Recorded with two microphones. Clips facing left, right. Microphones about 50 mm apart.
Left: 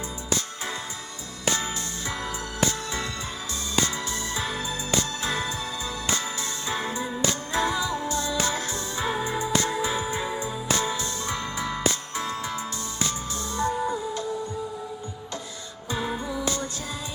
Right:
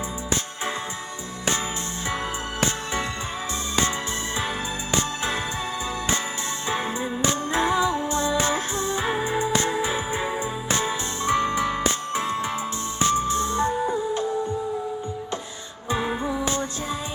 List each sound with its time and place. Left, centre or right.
2.6 s music: right
4.4 s music: right
6.7 s music: right
15.9 s music: right